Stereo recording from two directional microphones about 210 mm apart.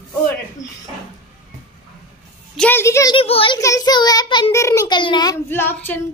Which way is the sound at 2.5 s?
5° left (ahead or behind).